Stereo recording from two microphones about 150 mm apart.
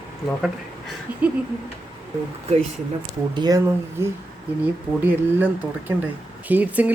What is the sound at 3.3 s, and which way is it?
Speech, 25° right (ahead or behind).